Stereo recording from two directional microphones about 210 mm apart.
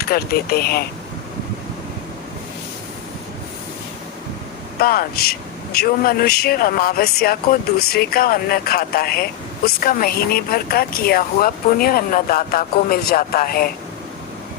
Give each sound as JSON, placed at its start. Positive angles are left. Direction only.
{"t": 0.0, "sound": "speech", "side_deg": 45}
{"t": 4.8, "sound": "speech", "side_deg": 45}